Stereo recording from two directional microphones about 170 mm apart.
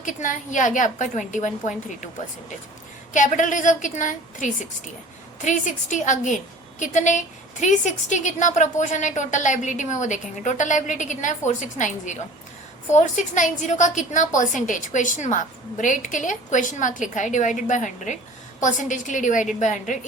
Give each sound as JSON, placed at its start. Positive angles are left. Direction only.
{"t": 0.0, "sound": "a woman's voice", "side_deg": 50}
{"t": 3.1, "sound": "a woman's voice", "side_deg": 50}